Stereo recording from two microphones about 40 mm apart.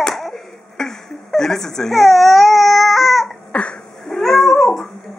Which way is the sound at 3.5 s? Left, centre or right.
Left.